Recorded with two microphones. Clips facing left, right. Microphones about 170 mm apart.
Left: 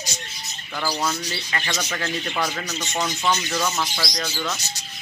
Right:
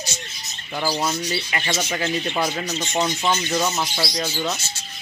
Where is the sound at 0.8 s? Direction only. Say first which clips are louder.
Right 2 dB; 20° right (ahead or behind).